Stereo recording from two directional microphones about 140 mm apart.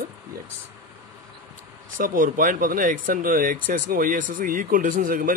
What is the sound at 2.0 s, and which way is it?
Speech, 80° right.